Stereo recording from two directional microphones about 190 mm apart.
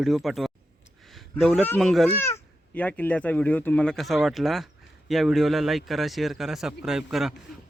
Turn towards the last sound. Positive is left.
turn(degrees=0)  # may be behind; listen again after turning